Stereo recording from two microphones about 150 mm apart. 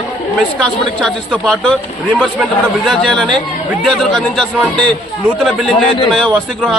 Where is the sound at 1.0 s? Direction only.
Centre (ahead or behind).